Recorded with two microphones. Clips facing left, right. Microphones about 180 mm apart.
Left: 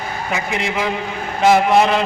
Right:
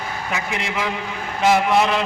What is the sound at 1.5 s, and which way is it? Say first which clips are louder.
Speech: left 4 dB; 40° left (ahead or behind).